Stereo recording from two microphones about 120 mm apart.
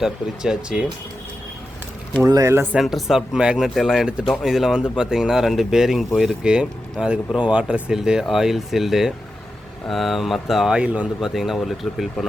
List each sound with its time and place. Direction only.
0.0 s speech: 5° right (ahead or behind)
2.2 s speech: 25° right (ahead or behind)
2.7 s speech: centre (ahead or behind)
11.3 s speech: centre (ahead or behind)